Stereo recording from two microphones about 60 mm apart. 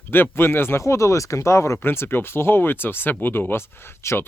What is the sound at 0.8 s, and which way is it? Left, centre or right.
Speech, left.